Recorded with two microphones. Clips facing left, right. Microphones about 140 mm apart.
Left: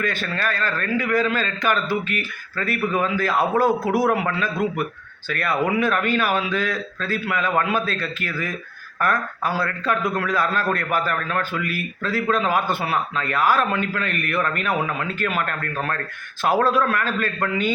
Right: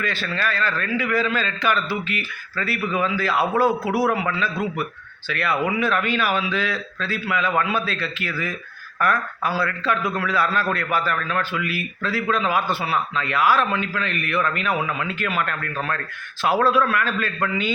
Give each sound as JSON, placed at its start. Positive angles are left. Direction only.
{"t": 0.0, "sound": "a man's voice", "side_deg": 50}